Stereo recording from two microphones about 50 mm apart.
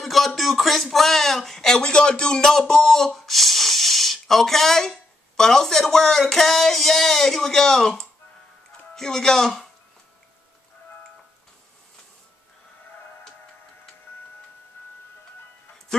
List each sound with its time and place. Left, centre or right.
0.0 s speech: centre